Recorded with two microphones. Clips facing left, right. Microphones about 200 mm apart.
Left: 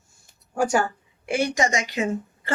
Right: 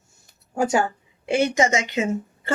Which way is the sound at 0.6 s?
20° right (ahead or behind).